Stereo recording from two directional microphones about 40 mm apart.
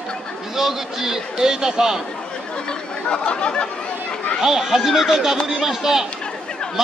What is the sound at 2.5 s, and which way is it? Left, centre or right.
Chatter, left.